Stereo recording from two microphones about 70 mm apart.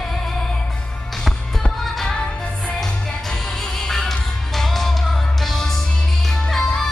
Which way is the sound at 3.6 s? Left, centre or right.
Centre.